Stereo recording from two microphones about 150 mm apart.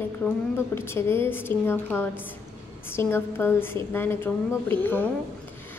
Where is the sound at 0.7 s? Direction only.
15° left (ahead or behind).